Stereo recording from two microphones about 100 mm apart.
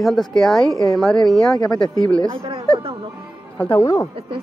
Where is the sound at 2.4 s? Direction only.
70° right (ahead or behind).